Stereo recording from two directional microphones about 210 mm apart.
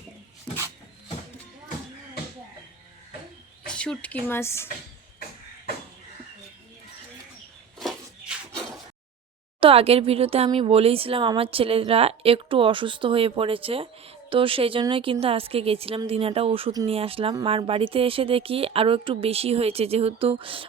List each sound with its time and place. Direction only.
3.7 s speech: 5° left (ahead or behind)
7.8 s a sound: centre (ahead or behind)
9.6 s speech: 25° right (ahead or behind)